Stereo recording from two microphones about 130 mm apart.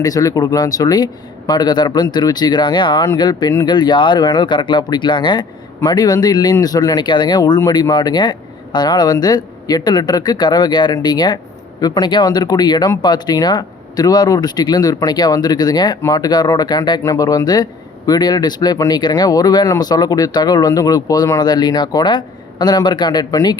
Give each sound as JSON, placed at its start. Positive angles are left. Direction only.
{"t": 0.0, "sound": "a man's voice", "side_deg": 30}